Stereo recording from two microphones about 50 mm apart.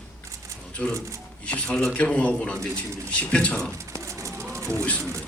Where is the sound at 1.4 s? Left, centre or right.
Left.